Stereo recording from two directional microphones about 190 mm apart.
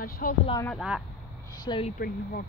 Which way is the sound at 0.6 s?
5° right (ahead or behind).